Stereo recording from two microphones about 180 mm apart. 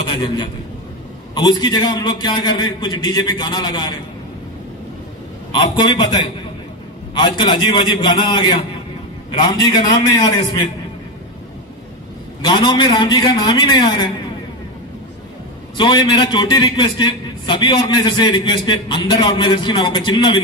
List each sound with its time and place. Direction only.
0.1 s a man's voice: 25° left (ahead or behind)
5.5 s a man's voice: 25° left (ahead or behind)
7.2 s a man's voice: 25° left (ahead or behind)
12.4 s a man's voice: 25° left (ahead or behind)
15.8 s a man's voice: 25° left (ahead or behind)